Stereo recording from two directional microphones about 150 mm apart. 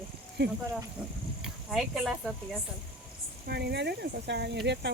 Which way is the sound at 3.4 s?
90° right.